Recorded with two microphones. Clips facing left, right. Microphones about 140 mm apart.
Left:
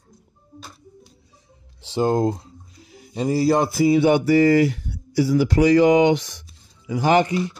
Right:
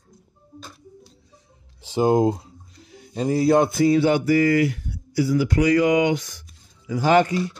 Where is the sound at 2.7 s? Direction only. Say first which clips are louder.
Even; 5° left (ahead or behind).